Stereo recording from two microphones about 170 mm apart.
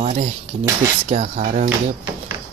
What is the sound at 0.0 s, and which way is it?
Speech, 40° right (ahead or behind).